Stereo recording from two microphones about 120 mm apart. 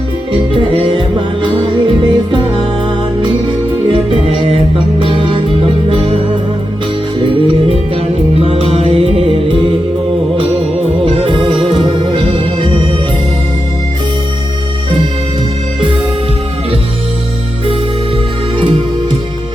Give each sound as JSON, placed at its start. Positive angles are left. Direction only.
{"t": 0.5, "sound": "music", "side_deg": -45}
{"t": 3.8, "sound": "music", "side_deg": -45}
{"t": 7.2, "sound": "music", "side_deg": -45}
{"t": 11.0, "sound": "music", "side_deg": -50}